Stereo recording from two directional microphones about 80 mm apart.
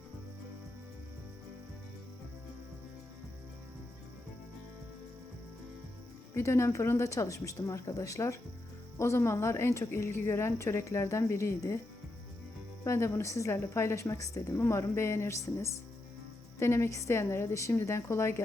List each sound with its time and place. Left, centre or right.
6.3 s a woman's voice: left
12.8 s a woman's voice: left
14.6 s a woman's voice: left